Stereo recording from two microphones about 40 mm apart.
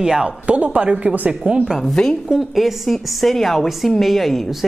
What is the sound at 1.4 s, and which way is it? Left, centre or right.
Speech, right.